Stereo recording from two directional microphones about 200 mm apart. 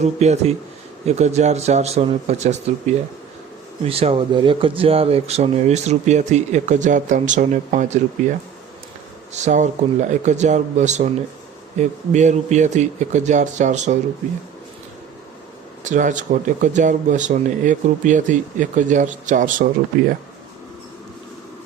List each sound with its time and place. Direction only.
0.0 s speech: 35° right (ahead or behind)
3.8 s speech: 30° right (ahead or behind)
15.8 s speech: 40° right (ahead or behind)